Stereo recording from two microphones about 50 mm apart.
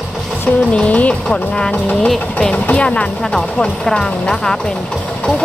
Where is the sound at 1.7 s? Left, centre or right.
Left.